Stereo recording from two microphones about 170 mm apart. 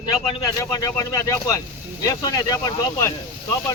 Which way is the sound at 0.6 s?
20° left (ahead or behind).